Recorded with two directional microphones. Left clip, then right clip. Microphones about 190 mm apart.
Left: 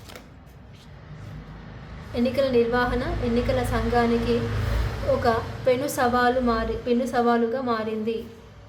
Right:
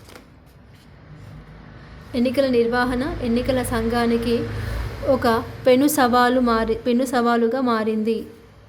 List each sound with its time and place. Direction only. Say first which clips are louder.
2.1 s a woman's voice: right 3 dB; 35° right (ahead or behind)